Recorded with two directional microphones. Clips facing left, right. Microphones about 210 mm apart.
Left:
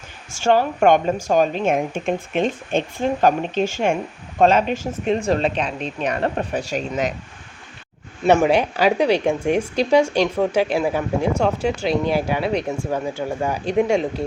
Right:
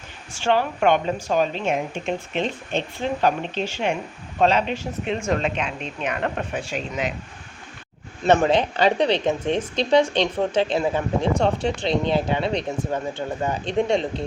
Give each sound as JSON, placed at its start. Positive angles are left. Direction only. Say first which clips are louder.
{"t": 0.3, "sound": "a woman's voice", "louder": "left 4 dB", "side_deg": 45}
{"t": 8.2, "sound": "speech", "louder": "left 2 dB", "side_deg": 10}